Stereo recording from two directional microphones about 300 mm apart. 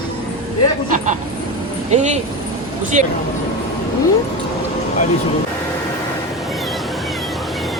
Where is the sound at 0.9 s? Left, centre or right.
Right.